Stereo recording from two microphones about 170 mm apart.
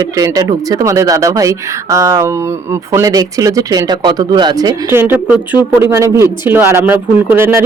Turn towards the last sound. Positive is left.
turn(degrees=-10)  # may be behind; listen again after turning